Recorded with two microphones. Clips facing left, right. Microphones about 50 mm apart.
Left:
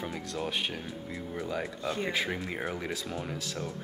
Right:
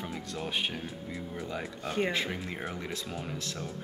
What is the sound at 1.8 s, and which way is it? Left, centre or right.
Speech, right.